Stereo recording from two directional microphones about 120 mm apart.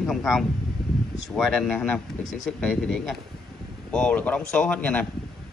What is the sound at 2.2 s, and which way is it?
Speech, 90° left.